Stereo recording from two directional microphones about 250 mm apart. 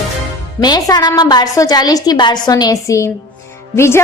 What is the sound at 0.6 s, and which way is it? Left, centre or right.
A woman's voice, centre.